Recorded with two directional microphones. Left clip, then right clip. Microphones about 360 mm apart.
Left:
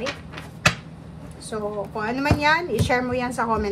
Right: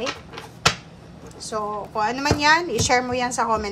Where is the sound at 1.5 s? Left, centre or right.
Centre.